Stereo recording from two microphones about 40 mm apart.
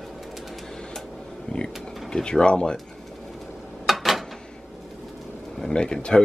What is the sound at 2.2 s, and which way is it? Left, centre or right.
Speech, left.